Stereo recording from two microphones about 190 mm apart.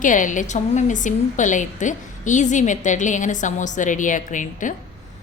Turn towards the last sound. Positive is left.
turn(degrees=45)  # may be behind; listen again after turning